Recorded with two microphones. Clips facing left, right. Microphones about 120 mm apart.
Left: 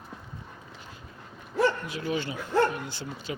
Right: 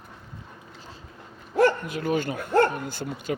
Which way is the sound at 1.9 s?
50° right (ahead or behind).